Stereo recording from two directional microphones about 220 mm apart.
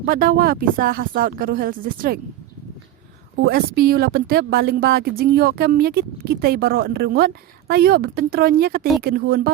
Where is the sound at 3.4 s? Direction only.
45° right (ahead or behind).